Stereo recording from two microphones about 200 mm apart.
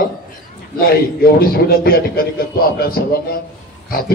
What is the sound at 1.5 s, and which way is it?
Speech, 50° left (ahead or behind).